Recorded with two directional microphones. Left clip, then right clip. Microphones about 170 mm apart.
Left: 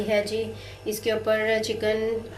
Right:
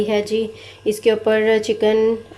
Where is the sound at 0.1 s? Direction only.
35° right (ahead or behind).